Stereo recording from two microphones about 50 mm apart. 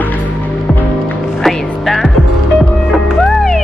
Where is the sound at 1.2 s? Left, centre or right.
Centre.